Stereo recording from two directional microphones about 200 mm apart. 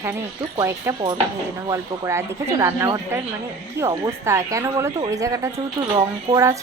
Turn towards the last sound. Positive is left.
turn(degrees=-15)  # may be behind; listen again after turning